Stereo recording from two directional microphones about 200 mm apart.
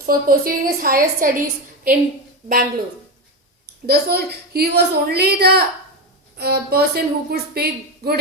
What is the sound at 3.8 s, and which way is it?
Speech, 50° right (ahead or behind).